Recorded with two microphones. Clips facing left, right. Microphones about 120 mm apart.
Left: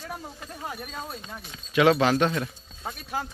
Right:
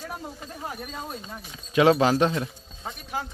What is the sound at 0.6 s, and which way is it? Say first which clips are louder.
Speech: even; centre (ahead or behind).